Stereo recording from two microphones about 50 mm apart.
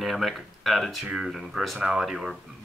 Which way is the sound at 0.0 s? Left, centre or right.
Centre.